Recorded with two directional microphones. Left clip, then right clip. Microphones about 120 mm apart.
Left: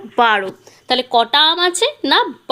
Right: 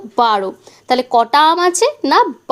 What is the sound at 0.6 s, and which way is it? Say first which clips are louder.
A woman's voice: right 2 dB; 20° right (ahead or behind).